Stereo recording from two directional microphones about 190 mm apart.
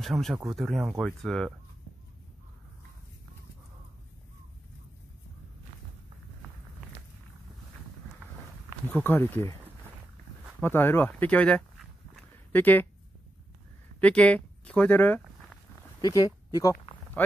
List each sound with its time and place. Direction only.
0.0 s speech: centre (ahead or behind)
8.8 s speech: 10° left (ahead or behind)
10.6 s speech: 10° left (ahead or behind)
13.9 s a sound: 5° left (ahead or behind)
16.0 s speech: 20° left (ahead or behind)